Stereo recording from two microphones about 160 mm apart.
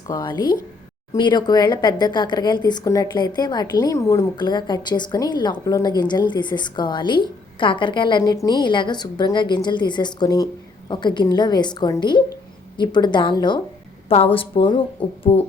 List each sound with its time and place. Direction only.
0.1 s a woman's voice: 25° left (ahead or behind)